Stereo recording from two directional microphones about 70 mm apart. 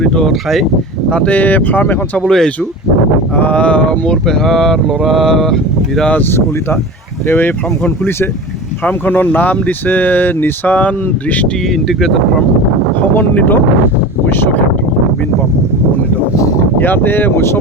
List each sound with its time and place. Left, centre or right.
0.0 s speech: centre
1.1 s speech: centre
2.2 s speech: centre
7.3 s speech: left
8.8 s speech: left
11.7 s speech: centre
13.0 s speech: left
16.7 s speech: left